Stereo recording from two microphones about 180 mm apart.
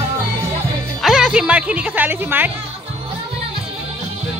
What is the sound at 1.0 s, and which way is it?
Speech, 5° right (ahead or behind).